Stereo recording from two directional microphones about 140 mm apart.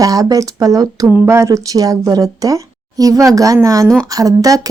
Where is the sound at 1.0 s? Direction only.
15° right (ahead or behind).